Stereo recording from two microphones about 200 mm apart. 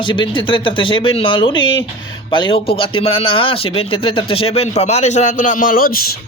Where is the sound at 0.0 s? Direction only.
25° left (ahead or behind).